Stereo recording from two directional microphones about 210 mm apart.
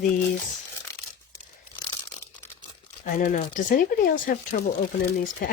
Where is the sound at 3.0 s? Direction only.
40° left (ahead or behind).